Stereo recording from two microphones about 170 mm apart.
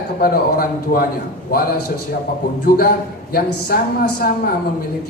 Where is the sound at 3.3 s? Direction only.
65° left (ahead or behind).